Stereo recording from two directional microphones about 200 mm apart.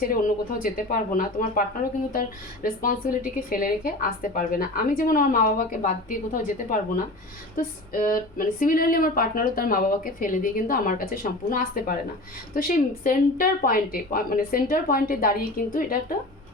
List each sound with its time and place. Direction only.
0.1 s speech: 45° left (ahead or behind)
2.6 s speech: 45° left (ahead or behind)